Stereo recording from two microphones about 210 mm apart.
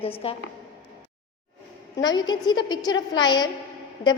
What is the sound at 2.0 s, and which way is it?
A woman's voice, 20° left (ahead or behind).